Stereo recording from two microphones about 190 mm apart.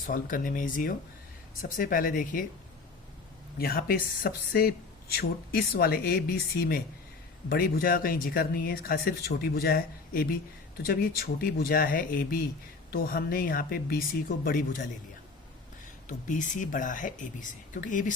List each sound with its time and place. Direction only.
0.0 s speech: 45° left (ahead or behind)
3.6 s speech: 50° left (ahead or behind)
16.0 s speech: 40° left (ahead or behind)